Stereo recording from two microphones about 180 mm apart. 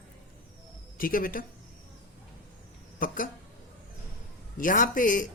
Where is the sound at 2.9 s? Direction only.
50° left (ahead or behind).